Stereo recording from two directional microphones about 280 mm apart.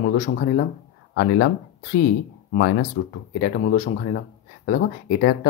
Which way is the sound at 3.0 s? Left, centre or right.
Left.